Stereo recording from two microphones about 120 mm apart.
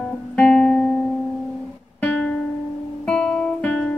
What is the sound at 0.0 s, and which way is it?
Guitar, 10° left (ahead or behind).